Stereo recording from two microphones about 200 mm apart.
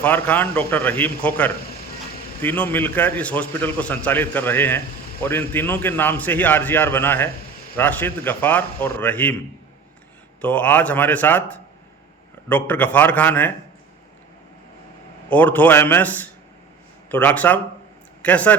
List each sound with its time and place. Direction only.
0.0 s a man's voice: 10° left (ahead or behind)
10.4 s a man's voice: 5° left (ahead or behind)
15.3 s a man's voice: 10° left (ahead or behind)